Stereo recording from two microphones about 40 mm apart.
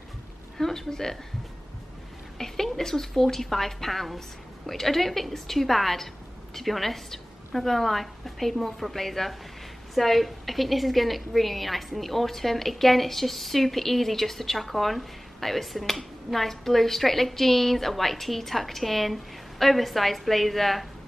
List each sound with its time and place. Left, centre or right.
0.6 s a woman's voice: centre
2.3 s a woman's voice: centre